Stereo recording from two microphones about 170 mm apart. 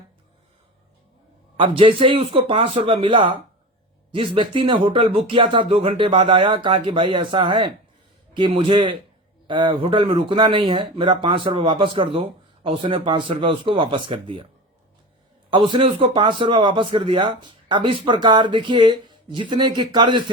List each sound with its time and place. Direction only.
1.5 s a man's voice: 30° right (ahead or behind)
15.4 s a man's voice: 30° right (ahead or behind)